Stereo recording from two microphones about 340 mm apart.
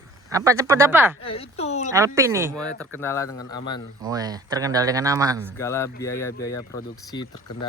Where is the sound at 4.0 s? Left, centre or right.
Centre.